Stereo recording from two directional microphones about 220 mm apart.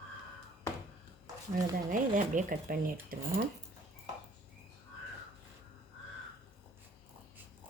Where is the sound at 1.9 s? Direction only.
35° right (ahead or behind).